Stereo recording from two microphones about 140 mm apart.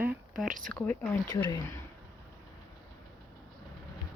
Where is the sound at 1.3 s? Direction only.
30° left (ahead or behind).